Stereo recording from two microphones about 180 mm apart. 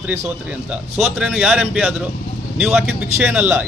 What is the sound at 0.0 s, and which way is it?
A man's voice, 10° right (ahead or behind).